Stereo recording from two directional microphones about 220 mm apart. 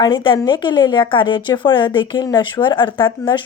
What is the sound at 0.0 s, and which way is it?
Speech, 20° left (ahead or behind).